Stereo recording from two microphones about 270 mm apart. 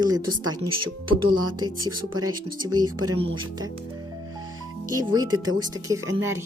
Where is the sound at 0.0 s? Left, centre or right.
Centre.